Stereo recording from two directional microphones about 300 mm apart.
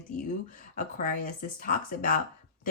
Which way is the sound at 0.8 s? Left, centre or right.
Left.